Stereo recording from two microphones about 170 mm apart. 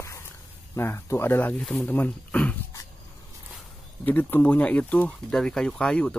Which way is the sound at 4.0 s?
10° left (ahead or behind).